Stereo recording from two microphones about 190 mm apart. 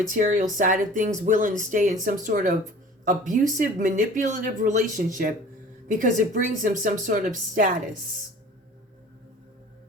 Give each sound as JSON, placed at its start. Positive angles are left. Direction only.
{"t": 0.1, "sound": "speech", "side_deg": -45}